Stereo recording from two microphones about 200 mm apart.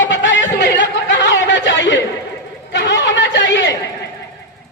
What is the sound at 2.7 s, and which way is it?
Chatter, 65° left (ahead or behind).